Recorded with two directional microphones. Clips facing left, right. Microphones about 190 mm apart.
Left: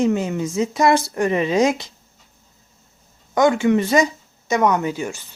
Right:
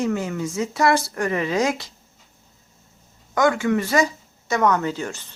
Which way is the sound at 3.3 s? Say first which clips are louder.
Left 4 dB; 20° left (ahead or behind).